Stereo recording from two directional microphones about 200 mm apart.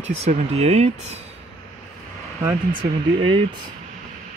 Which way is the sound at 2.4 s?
20° right (ahead or behind).